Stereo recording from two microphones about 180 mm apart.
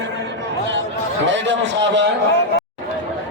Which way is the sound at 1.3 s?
80° right.